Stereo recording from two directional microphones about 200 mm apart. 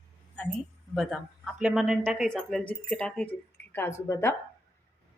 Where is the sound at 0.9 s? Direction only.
Centre (ahead or behind).